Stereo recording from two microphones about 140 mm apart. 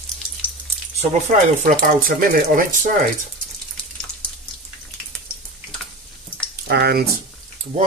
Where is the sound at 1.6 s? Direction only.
85° right.